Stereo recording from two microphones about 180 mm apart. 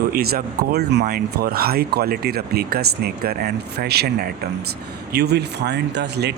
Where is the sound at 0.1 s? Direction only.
55° right (ahead or behind).